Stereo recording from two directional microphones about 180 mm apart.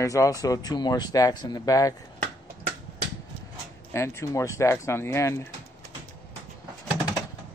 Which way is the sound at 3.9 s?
15° left (ahead or behind).